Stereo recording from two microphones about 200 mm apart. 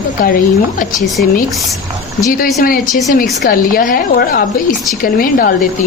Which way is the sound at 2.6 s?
45° left (ahead or behind).